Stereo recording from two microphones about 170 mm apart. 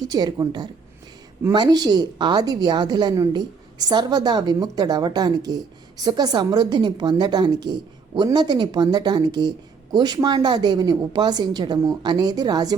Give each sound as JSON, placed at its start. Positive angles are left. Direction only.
{"t": 0.0, "sound": "a woman's voice", "side_deg": -25}